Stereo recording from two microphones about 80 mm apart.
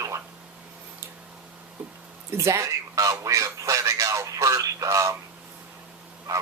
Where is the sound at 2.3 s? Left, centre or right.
Right.